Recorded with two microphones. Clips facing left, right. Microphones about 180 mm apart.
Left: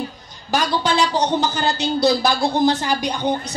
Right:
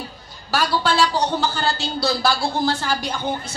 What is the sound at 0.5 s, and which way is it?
Speech, 20° left (ahead or behind).